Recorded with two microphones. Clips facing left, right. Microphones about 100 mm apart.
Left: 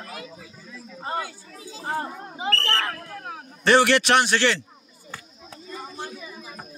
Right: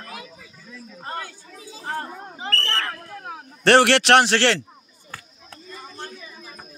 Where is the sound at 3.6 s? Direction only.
75° right (ahead or behind).